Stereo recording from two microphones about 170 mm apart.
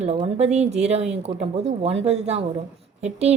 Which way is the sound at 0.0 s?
40° right (ahead or behind).